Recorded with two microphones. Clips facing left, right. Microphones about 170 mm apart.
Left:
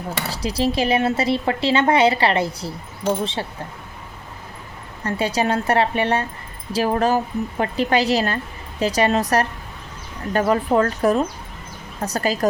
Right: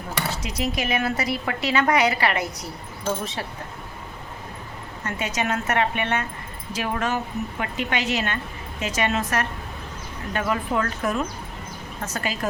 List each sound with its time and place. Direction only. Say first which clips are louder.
0.3 s speech: left 8 dB; 30° left (ahead or behind)
5.0 s a woman's voice: left 6 dB; 35° left (ahead or behind)